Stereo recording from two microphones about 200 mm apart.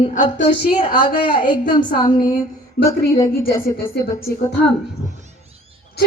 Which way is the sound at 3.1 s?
15° left (ahead or behind).